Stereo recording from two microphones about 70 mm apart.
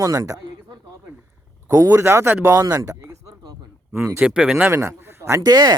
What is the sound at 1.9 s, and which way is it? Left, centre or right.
Speech, right.